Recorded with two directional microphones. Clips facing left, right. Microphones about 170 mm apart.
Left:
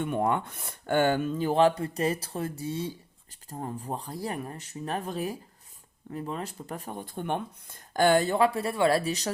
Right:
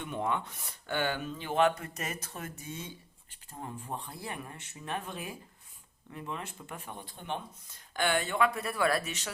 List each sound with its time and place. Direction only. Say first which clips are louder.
0.0 s speech: left 6 dB; 50° left (ahead or behind)